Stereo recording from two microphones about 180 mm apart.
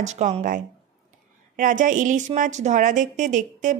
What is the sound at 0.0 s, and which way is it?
A woman's voice, 40° right (ahead or behind).